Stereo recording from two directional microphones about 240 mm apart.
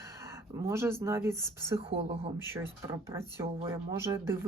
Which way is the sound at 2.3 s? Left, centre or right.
Centre.